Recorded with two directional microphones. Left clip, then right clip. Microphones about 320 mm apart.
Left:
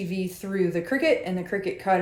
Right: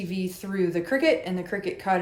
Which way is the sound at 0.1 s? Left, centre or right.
Centre.